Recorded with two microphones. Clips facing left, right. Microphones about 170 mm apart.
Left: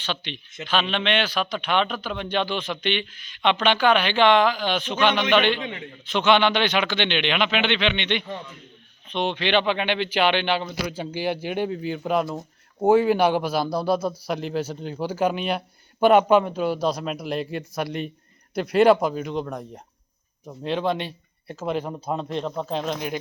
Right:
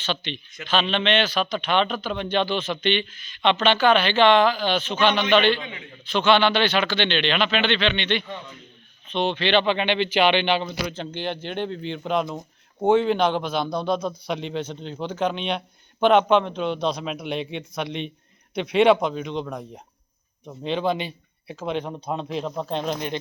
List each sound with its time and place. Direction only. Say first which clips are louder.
0.0 s speech: right 2 dB; 10° left (ahead or behind)